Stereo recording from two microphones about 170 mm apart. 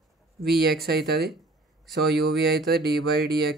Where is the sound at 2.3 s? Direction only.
70° right (ahead or behind).